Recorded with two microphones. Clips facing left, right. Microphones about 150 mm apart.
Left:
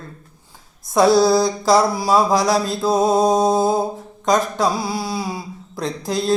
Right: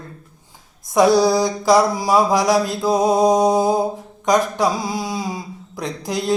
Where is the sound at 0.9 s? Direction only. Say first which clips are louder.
Even; 15° right (ahead or behind).